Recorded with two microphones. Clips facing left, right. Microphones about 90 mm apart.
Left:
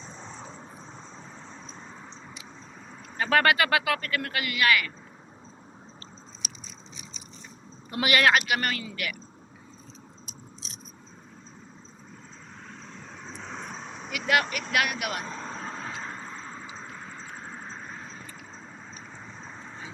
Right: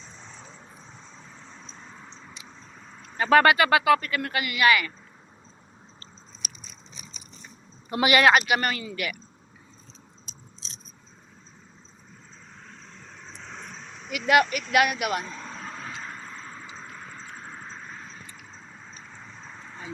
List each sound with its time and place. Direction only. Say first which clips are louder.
1.5 s vehicle: left 2 dB; 15° left (ahead or behind)
3.2 s speech: right 4 dB; 10° right (ahead or behind)
6.4 s biting: right 1 dB; 45° right (ahead or behind)
7.9 s speech: right 3 dB; 15° right (ahead or behind)
10.2 s biting: left 3 dB; 10° left (ahead or behind)
13.5 s vehicle: left 3 dB; 15° left (ahead or behind)
14.7 s speech: right 3 dB; 10° right (ahead or behind)
15.2 s vehicle: left 2 dB; 35° left (ahead or behind); by 18.1 s 15° left (ahead or behind)
19.5 s vehicle: left 1 dB; 15° left (ahead or behind)